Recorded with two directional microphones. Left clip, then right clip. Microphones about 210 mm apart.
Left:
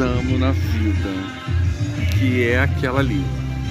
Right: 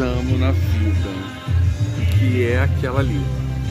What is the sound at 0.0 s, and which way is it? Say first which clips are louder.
Speech: left 1 dB; 20° left (ahead or behind).